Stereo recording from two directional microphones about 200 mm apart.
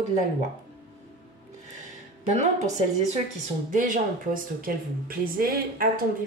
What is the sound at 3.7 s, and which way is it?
Speech, 40° right (ahead or behind).